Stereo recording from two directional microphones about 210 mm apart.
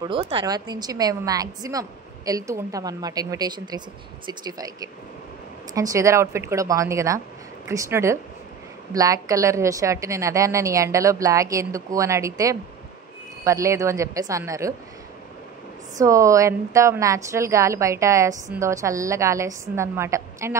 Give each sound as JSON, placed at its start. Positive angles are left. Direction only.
{"t": 0.0, "sound": "a woman's voice", "side_deg": -25}
{"t": 16.0, "sound": "a woman's voice", "side_deg": -15}